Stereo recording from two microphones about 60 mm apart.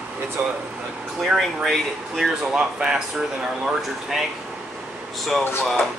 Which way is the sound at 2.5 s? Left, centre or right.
Centre.